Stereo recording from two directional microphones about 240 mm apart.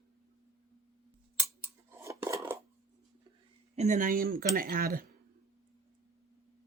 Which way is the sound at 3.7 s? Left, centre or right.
Right.